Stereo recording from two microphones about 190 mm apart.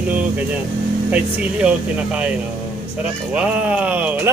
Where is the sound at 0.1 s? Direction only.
10° right (ahead or behind).